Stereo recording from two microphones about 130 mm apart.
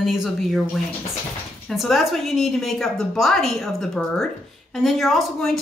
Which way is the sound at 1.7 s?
Centre (ahead or behind).